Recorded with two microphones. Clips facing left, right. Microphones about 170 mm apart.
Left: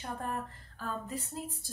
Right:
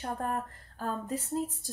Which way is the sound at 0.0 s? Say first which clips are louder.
Right 4 dB; 45° right (ahead or behind).